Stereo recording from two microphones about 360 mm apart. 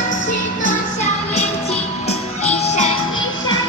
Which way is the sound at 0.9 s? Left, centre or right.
Centre.